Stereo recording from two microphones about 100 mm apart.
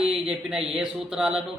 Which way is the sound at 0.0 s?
5° right (ahead or behind).